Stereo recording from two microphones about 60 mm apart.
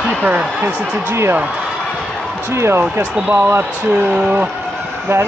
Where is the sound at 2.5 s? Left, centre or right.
Right.